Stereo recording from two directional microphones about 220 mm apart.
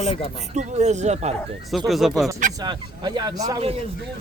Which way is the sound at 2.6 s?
20° right (ahead or behind).